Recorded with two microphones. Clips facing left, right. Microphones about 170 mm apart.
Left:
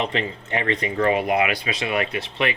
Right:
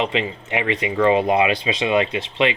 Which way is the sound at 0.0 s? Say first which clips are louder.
Right 3 dB; 15° right (ahead or behind).